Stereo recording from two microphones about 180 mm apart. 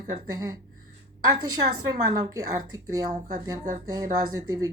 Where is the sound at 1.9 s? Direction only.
20° right (ahead or behind).